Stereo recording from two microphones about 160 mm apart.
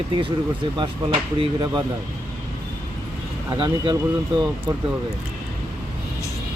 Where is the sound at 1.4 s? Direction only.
30° right (ahead or behind).